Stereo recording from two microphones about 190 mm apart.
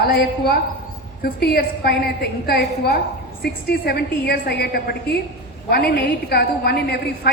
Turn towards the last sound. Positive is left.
turn(degrees=55)  # may be behind; listen again after turning